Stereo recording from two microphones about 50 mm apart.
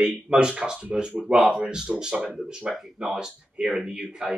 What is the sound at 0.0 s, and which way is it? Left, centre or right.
Speech, centre.